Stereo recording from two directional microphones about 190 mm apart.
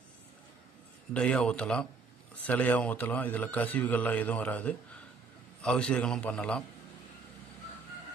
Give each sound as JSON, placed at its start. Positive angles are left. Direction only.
{"t": 1.1, "sound": "a man's voice", "side_deg": 5}